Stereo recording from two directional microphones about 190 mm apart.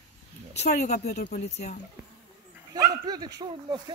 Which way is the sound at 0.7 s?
40° left (ahead or behind).